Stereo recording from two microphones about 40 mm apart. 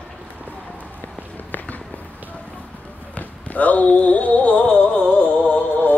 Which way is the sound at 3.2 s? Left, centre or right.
Left.